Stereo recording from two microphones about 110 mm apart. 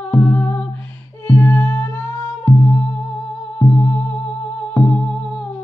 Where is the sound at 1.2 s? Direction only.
15° left (ahead or behind).